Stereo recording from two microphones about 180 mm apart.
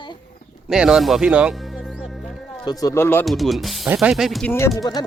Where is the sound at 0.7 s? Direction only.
5° right (ahead or behind).